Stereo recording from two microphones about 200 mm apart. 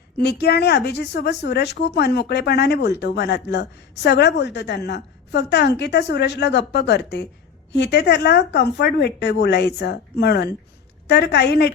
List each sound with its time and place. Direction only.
0.2 s speech: 55° left (ahead or behind)